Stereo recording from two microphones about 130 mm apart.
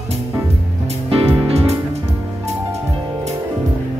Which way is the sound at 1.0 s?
45° right (ahead or behind).